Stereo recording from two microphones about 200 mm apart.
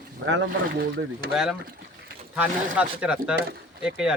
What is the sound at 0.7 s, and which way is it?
Speech, 45° right (ahead or behind).